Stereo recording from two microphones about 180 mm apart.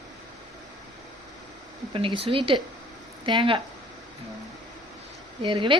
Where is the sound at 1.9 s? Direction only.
30° right (ahead or behind).